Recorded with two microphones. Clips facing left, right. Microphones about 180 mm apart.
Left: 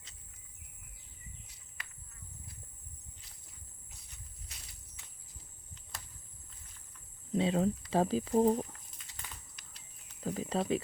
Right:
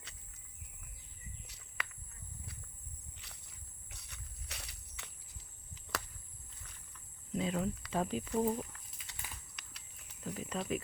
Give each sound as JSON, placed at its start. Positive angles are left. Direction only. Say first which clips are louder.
{"t": 1.5, "sound": "bird", "louder": "right 7 dB", "side_deg": -75}
{"t": 3.2, "sound": "walk", "louder": "right 2 dB", "side_deg": -70}
{"t": 7.3, "sound": "speech", "louder": "left 6 dB", "side_deg": 30}
{"t": 9.1, "sound": "typing", "louder": "right 2 dB", "side_deg": -70}
{"t": 9.6, "sound": "a sound", "louder": "right 3 dB", "side_deg": -75}
{"t": 10.2, "sound": "a sound", "louder": "left 6 dB", "side_deg": 35}